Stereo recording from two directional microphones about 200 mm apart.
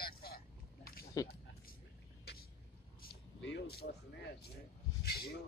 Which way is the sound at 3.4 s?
60° left (ahead or behind).